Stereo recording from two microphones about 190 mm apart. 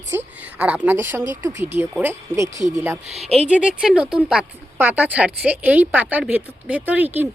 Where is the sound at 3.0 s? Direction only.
35° right (ahead or behind).